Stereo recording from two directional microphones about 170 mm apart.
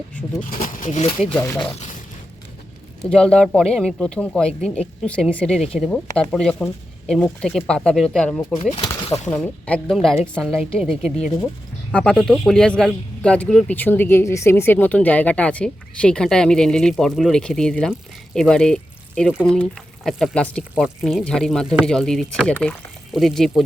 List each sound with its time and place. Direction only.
0.6 s speech: 50° left (ahead or behind)
1.3 s speech: 10° left (ahead or behind)
3.0 s a man's voice: 5° left (ahead or behind)
9.0 s speech: 40° left (ahead or behind)
9.3 s a man's voice: 5° left (ahead or behind)
19.3 s a man's voice: 5° right (ahead or behind)